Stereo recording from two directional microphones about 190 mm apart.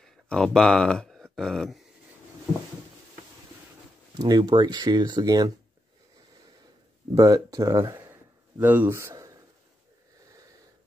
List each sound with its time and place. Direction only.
0.0 s speech: centre (ahead or behind)
4.2 s speech: 20° right (ahead or behind)
7.2 s speech: 20° right (ahead or behind)